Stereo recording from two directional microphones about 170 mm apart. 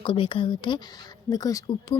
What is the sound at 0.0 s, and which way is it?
Speech, 30° left (ahead or behind).